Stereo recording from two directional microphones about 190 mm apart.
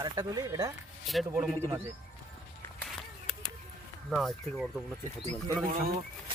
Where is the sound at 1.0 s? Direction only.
5° right (ahead or behind).